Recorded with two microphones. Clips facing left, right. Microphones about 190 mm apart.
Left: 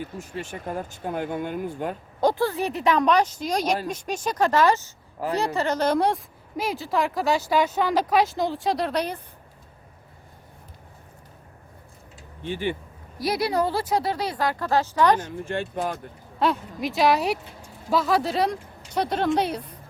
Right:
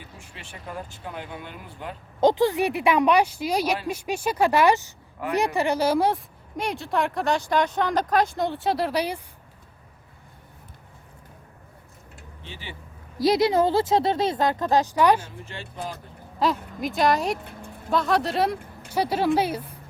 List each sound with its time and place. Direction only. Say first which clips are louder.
0.0 s speech: left 11 dB; 45° left (ahead or behind)
2.2 s speech: right 3 dB; 20° right (ahead or behind)
5.2 s a woman's voice: left 1 dB; 35° left (ahead or behind)
5.5 s speech: even; 10° right (ahead or behind)
12.4 s speech: left 14 dB; 55° left (ahead or behind)
13.2 s a woman's voice: right 4 dB; 25° right (ahead or behind)
15.4 s speech: left 8 dB; 55° left (ahead or behind)
16.4 s speech: even; centre (ahead or behind)